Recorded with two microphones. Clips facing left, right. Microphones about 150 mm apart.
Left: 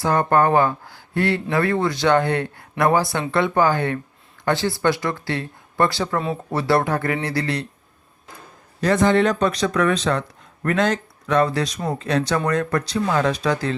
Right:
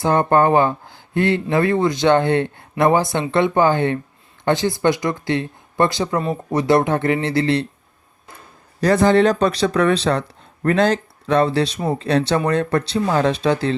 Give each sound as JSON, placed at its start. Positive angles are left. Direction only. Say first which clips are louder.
{"t": 0.0, "sound": "speech", "louder": "right 2 dB", "side_deg": -25}
{"t": 6.1, "sound": "speech", "louder": "right 2 dB", "side_deg": 0}
{"t": 6.5, "sound": "speech", "louder": "right 4 dB", "side_deg": -20}
{"t": 8.8, "sound": "speech", "louder": "right 3 dB", "side_deg": -35}